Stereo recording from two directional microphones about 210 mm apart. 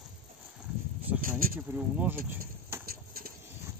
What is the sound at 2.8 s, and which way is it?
Bird, 45° right (ahead or behind).